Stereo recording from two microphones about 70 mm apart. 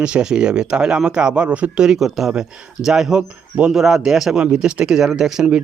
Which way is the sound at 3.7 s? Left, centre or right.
Centre.